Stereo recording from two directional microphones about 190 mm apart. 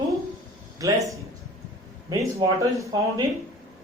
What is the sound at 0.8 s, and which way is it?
Speech, 15° right (ahead or behind).